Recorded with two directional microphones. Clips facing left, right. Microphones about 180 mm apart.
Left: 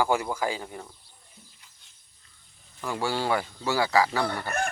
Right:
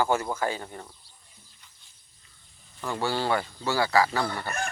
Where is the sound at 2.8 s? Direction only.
15° left (ahead or behind).